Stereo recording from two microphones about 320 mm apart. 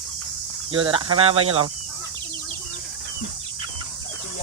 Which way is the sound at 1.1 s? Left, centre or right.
Right.